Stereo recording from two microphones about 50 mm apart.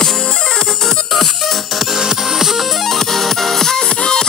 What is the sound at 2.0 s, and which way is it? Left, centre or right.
Music, centre.